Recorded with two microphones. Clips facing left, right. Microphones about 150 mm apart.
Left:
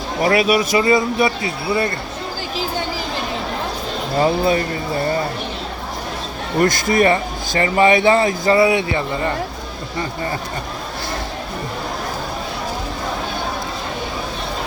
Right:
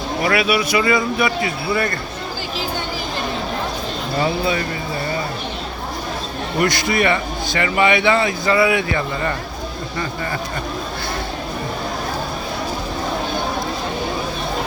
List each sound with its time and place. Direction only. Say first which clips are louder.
0.2 s speech: left 3 dB; 40° left (ahead or behind)
4.2 s speech: left 4 dB; 40° left (ahead or behind)
6.6 s speech: left 3 dB; 45° left (ahead or behind); by 9.3 s 25° left (ahead or behind)